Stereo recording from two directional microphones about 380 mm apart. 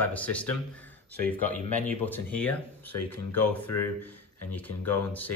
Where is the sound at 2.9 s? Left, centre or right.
Left.